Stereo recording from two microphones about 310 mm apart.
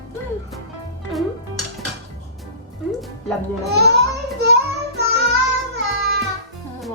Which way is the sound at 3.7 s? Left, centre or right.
Right.